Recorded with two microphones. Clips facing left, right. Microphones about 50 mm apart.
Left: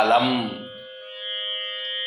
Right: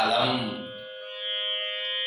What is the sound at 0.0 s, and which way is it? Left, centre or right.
Speech, left.